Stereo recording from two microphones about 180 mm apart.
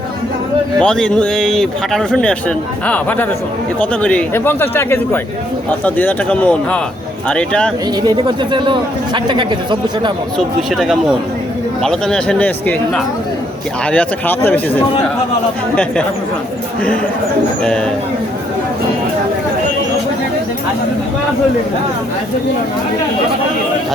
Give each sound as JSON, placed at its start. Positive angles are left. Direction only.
{"t": 0.8, "sound": "speech", "side_deg": 5}
{"t": 8.0, "sound": "speech", "side_deg": -25}
{"t": 10.3, "sound": "speech", "side_deg": 0}
{"t": 17.6, "sound": "speech", "side_deg": 5}